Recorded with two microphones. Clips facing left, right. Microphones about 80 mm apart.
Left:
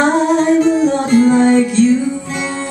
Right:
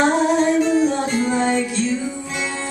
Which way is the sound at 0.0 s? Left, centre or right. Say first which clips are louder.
Left 4 dB; left.